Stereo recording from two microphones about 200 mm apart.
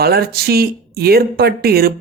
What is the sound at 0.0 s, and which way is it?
Speech, 50° right (ahead or behind).